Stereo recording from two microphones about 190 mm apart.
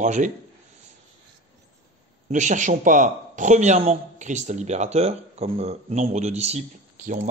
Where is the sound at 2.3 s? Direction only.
40° right (ahead or behind).